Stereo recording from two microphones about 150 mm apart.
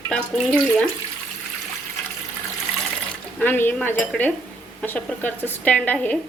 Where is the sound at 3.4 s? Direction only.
15° left (ahead or behind).